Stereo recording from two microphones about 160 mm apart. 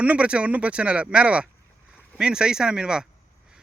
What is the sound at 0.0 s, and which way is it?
Speech, 10° right (ahead or behind).